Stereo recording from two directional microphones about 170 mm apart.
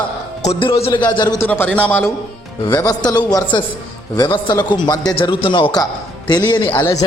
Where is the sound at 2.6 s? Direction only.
25° left (ahead or behind).